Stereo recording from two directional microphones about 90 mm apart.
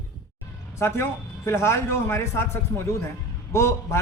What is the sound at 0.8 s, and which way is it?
A man's voice, 30° left (ahead or behind).